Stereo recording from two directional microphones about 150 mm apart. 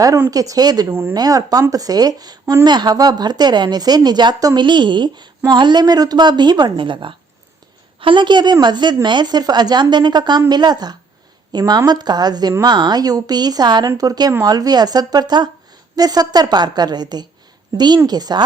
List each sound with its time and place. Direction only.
0.0 s a woman's voice: 25° right (ahead or behind)